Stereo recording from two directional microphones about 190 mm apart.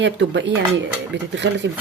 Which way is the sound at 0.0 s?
70° right (ahead or behind).